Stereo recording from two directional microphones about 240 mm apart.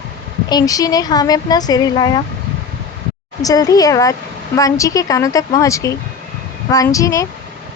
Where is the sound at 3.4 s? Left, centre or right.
Centre.